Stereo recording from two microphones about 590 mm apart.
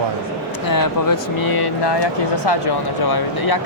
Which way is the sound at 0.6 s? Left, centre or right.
Left.